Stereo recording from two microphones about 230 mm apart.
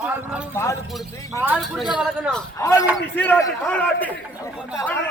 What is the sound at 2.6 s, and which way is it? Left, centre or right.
A man's voice, centre.